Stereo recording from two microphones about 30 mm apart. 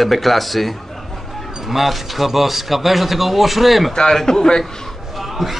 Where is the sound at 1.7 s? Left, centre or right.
Centre.